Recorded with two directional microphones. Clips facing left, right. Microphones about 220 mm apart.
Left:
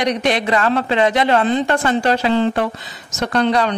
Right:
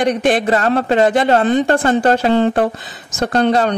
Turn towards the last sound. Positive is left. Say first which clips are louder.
# right 2 dB
turn(degrees=-45)  # may be behind; listen again after turning